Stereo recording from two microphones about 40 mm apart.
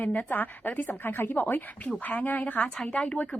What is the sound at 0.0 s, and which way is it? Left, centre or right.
Speech, left.